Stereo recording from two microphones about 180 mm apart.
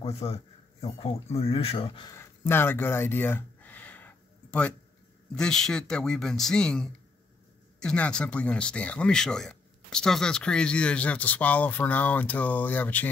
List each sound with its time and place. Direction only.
0.0 s a man's voice: 35° left (ahead or behind)
2.0 s a sound: 15° left (ahead or behind)
5.3 s a man's voice: 5° left (ahead or behind)